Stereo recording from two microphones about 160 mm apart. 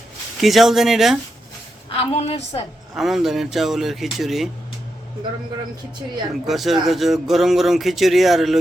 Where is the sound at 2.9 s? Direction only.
Centre (ahead or behind).